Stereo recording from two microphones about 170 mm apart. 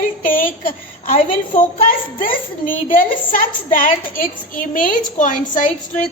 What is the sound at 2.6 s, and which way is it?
A woman's voice, 55° left (ahead or behind).